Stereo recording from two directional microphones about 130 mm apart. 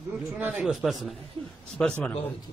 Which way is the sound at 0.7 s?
Centre (ahead or behind).